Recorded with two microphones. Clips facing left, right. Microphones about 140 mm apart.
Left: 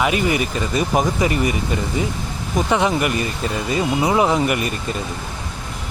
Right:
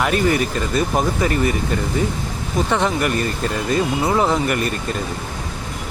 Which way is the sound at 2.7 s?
5° left (ahead or behind).